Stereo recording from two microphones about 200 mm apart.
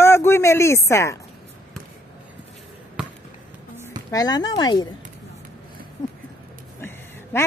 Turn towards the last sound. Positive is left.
turn(degrees=10)  # may be behind; listen again after turning